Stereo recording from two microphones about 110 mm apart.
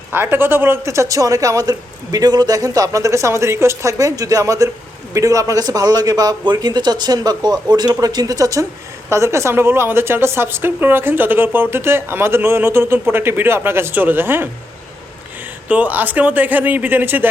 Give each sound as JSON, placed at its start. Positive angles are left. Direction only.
{"t": 0.1, "sound": "a woman's voice", "side_deg": -20}
{"t": 15.7, "sound": "speech", "side_deg": -15}